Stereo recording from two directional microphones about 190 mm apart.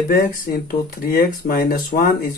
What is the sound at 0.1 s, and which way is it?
Speech, 50° left (ahead or behind).